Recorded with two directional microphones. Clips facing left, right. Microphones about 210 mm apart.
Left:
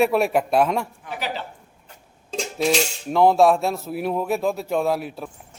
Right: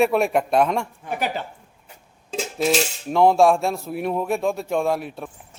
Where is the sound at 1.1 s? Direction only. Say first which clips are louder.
Right 5 dB; 50° right (ahead or behind).